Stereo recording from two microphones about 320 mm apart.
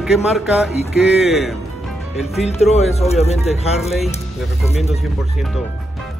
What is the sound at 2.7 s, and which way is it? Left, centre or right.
Speech, centre.